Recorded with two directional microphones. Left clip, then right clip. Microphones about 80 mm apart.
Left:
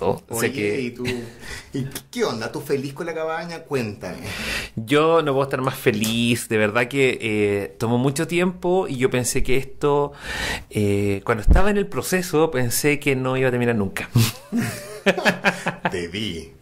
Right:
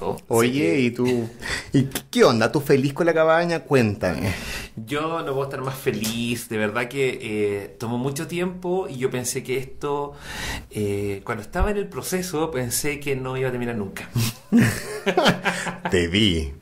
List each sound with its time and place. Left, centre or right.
0.0 s speech: left
0.4 s speech: right
4.4 s speech: left
14.5 s beatboxing: right
15.9 s speech: right